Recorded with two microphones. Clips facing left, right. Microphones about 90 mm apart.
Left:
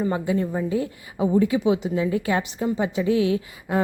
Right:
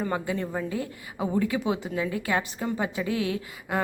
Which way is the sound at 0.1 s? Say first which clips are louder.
Left 5 dB; 25° left (ahead or behind).